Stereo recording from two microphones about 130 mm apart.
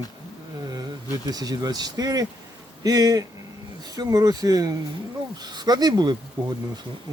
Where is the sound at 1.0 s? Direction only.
25° right (ahead or behind).